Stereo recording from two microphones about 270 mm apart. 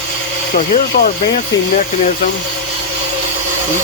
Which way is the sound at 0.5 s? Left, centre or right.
Left.